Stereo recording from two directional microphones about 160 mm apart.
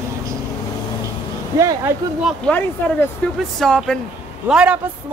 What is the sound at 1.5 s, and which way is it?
Speech, 20° right (ahead or behind).